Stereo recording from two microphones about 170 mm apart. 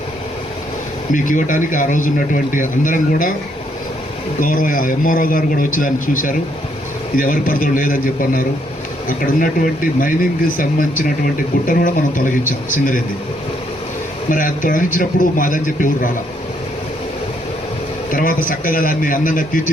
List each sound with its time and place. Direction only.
1.1 s speech: 50° left (ahead or behind)
4.4 s speech: 55° left (ahead or behind)
14.3 s speech: 50° left (ahead or behind)
18.1 s speech: 55° left (ahead or behind)